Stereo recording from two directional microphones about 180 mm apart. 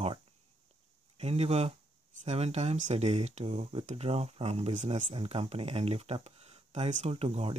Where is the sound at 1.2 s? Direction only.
35° right (ahead or behind).